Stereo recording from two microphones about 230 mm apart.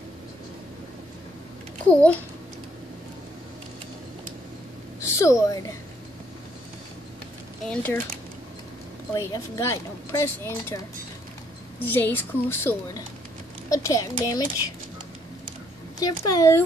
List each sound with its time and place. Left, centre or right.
5.0 s speech: centre
7.6 s speech: centre
9.1 s speech: centre
11.8 s speech: centre
16.0 s speech: centre